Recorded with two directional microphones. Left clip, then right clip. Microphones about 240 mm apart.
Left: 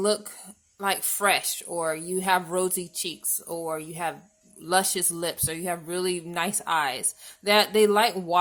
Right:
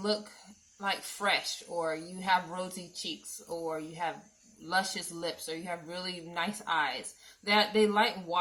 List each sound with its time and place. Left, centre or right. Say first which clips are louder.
0.8 s speech: left 7 dB; left